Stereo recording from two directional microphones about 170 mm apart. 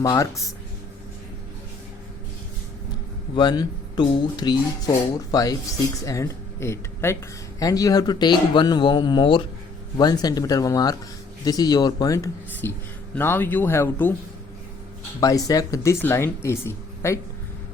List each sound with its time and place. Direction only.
0.0 s speech: 20° left (ahead or behind)
3.3 s speech: 25° left (ahead or behind)
15.2 s speech: 20° left (ahead or behind)